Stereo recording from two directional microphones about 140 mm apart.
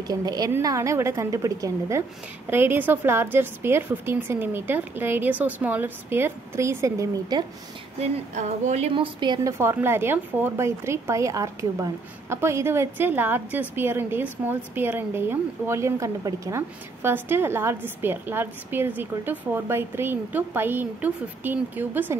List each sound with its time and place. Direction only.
0.0 s a woman's voice: 30° right (ahead or behind)
8.0 s a woman's voice: 55° right (ahead or behind); by 22.1 s 15° right (ahead or behind)